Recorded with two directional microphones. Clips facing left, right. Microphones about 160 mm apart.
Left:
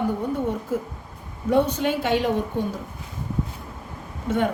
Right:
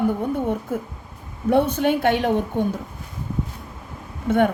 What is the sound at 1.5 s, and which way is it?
Speech, 55° right (ahead or behind).